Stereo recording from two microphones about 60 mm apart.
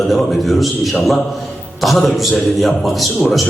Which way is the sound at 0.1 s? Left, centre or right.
Centre.